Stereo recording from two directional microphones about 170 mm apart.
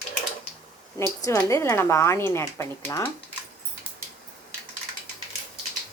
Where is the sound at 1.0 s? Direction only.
15° left (ahead or behind).